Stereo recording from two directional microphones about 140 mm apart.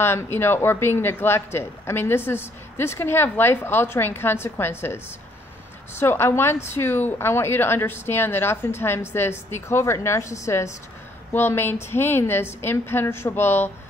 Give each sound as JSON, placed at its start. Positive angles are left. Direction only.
{"t": 0.0, "sound": "a woman's voice", "side_deg": 15}